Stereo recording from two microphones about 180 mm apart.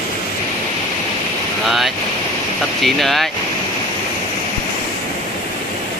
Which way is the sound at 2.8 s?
Centre (ahead or behind).